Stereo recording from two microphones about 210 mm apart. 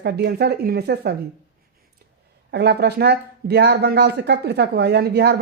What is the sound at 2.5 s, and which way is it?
Speech, 50° right (ahead or behind).